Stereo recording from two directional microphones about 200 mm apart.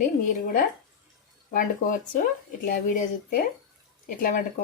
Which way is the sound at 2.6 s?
50° left (ahead or behind).